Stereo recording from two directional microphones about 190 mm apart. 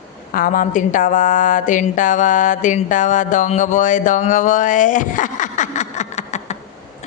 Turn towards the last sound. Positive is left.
turn(degrees=35)  # may be behind; listen again after turning